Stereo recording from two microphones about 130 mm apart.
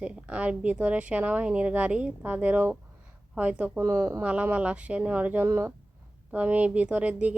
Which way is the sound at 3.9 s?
20° right (ahead or behind).